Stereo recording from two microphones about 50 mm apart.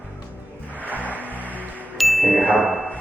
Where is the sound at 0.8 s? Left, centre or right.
Right.